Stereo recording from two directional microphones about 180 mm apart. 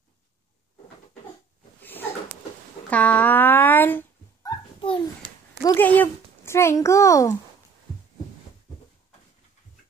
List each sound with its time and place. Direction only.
1.8 s a sound: 10° left (ahead or behind)
2.9 s dog: 10° left (ahead or behind)
5.6 s a child's voice: 20° left (ahead or behind)